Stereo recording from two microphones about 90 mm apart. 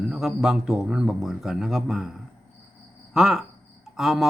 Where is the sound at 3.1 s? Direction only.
5° right (ahead or behind).